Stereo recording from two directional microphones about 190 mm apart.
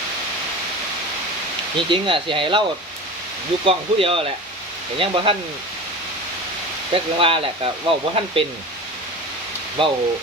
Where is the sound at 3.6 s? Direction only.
30° right (ahead or behind).